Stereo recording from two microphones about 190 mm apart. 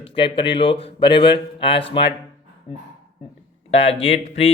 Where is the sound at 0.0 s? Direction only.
30° left (ahead or behind).